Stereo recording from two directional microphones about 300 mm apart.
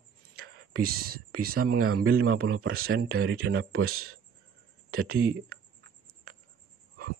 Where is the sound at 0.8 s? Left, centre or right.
Right.